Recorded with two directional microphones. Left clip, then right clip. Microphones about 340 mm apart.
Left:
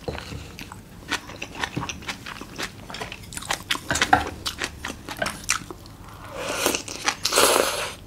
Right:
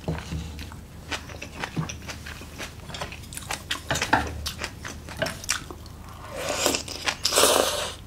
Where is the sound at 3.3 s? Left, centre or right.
Left.